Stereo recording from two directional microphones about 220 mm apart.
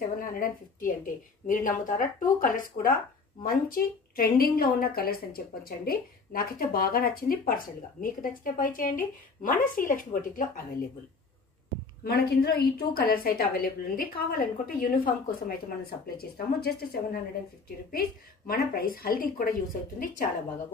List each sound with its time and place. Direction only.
0.2 s speech: 40° left (ahead or behind)
12.0 s a woman's voice: 45° left (ahead or behind)
18.5 s speech: 40° left (ahead or behind)